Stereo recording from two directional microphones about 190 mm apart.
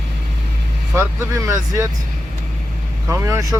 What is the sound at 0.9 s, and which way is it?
Speech, 15° right (ahead or behind).